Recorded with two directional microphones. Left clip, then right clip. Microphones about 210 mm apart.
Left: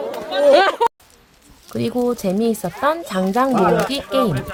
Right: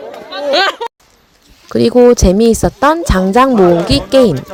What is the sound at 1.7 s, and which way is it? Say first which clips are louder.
Speech: right 13 dB; 35° right (ahead or behind).